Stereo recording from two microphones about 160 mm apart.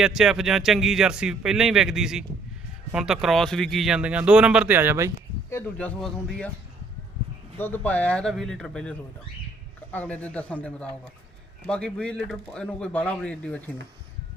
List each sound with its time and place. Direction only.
0.0 s speech: 5° right (ahead or behind)
5.5 s speech: 10° left (ahead or behind)
7.6 s speech: 10° left (ahead or behind)